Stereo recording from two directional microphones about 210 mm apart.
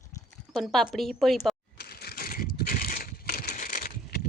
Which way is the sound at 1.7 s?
50° left (ahead or behind).